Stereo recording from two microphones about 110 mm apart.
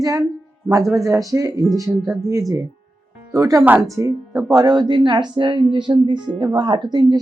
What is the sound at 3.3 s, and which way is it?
A woman's voice, 30° right (ahead or behind).